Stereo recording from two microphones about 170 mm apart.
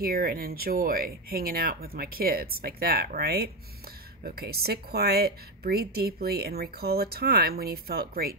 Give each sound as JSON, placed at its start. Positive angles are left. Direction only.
{"t": 0.0, "sound": "speech", "side_deg": -60}